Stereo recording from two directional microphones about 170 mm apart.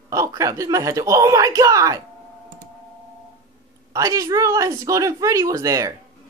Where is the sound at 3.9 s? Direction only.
20° right (ahead or behind).